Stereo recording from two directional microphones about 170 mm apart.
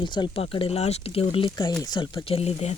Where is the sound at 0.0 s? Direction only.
25° left (ahead or behind).